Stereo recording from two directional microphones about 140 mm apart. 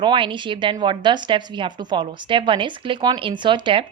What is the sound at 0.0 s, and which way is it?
Speech, 35° right (ahead or behind).